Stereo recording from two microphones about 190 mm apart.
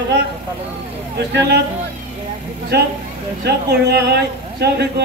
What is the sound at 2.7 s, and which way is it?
A man's voice, 60° right (ahead or behind).